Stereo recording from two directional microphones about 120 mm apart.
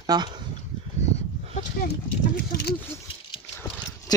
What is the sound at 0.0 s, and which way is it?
Speech, 35° right (ahead or behind).